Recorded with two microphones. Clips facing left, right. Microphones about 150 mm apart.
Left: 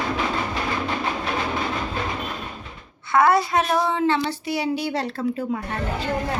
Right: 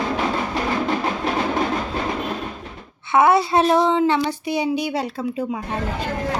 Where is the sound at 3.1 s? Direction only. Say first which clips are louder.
Right 2 dB; 25° right (ahead or behind).